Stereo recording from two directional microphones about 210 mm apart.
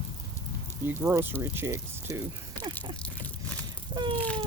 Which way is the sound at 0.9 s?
10° right (ahead or behind).